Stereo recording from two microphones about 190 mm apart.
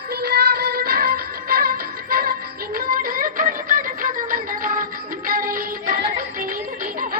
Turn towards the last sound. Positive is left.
turn(degrees=-50)  # may be behind; listen again after turning